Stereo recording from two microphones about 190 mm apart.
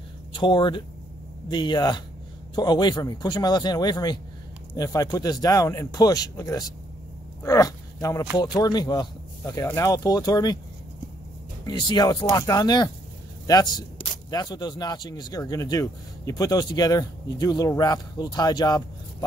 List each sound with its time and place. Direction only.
0.3 s speech: 25° left (ahead or behind)
11.6 s speech: 20° left (ahead or behind)